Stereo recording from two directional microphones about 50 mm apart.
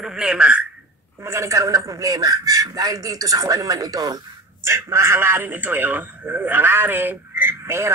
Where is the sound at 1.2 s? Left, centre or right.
Right.